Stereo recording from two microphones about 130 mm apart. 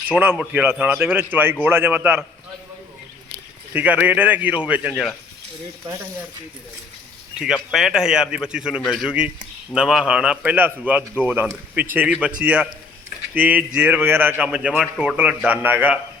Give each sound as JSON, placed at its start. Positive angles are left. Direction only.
{"t": 0.1, "sound": "a man's voice", "side_deg": -15}
{"t": 3.7, "sound": "a man's voice", "side_deg": -10}
{"t": 7.3, "sound": "a man's voice", "side_deg": -5}